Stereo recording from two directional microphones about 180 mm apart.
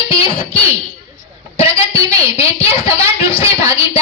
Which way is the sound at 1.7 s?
30° left (ahead or behind).